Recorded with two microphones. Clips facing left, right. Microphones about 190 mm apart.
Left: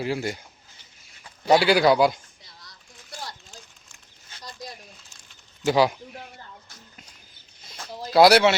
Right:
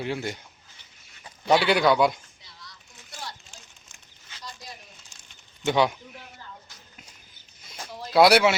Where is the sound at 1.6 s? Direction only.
5° left (ahead or behind).